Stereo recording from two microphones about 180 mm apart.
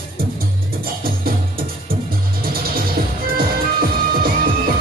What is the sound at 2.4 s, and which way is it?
Music, 55° right (ahead or behind).